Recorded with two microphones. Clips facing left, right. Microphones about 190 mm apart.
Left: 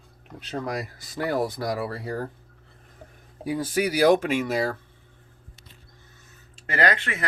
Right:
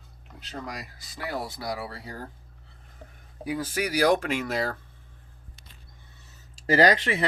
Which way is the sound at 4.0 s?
15° left (ahead or behind).